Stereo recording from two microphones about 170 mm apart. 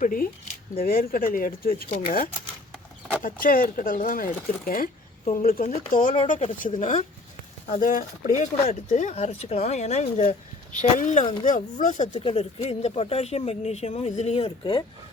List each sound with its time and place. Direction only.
0.0 s speech: 55° left (ahead or behind)
3.2 s speech: 55° left (ahead or behind)
12.2 s speech: 35° left (ahead or behind)